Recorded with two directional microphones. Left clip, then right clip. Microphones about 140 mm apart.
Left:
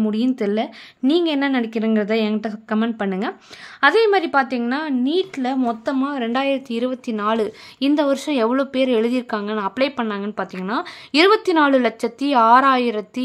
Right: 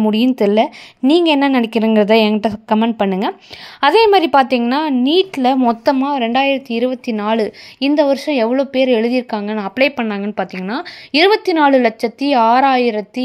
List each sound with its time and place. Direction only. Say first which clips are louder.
0.0 s a woman's voice: right 7 dB; 30° right (ahead or behind)
5.9 s a woman's voice: right 6 dB; 20° right (ahead or behind); by 13.2 s 5° right (ahead or behind)